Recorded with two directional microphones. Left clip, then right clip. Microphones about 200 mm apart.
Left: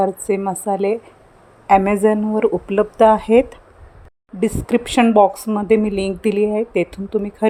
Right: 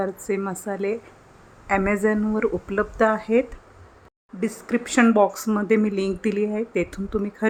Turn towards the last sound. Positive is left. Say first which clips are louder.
# left 6 dB
turn(degrees=10)  # may be behind; listen again after turning